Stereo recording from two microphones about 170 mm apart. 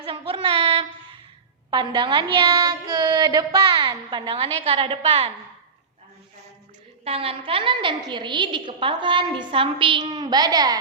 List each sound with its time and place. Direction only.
0.0 s child singing: 30° right (ahead or behind)
1.7 s a woman's voice: 25° right (ahead or behind)
7.0 s a woman's voice: 35° right (ahead or behind)